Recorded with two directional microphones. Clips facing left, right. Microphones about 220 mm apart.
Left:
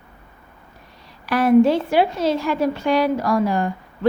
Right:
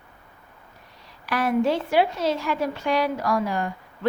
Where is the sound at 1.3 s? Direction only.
35° left (ahead or behind).